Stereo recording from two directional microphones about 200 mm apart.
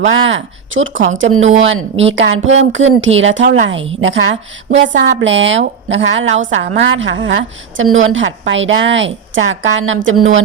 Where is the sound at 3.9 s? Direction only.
65° right (ahead or behind); by 10.5 s 85° right.